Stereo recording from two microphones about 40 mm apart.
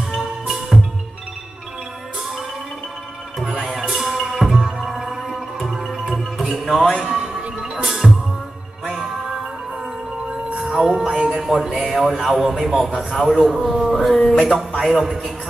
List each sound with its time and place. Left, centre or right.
0.1 s music: centre
3.5 s music: centre
7.0 s music: centre
10.6 s a man's voice: centre